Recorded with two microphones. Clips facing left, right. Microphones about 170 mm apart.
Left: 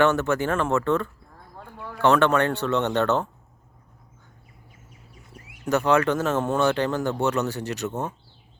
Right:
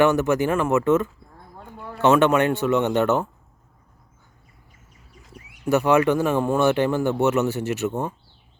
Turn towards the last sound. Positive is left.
turn(degrees=-5)  # may be behind; listen again after turning